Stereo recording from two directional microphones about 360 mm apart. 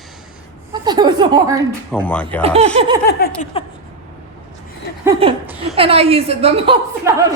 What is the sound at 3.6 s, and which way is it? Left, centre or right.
Speech, centre.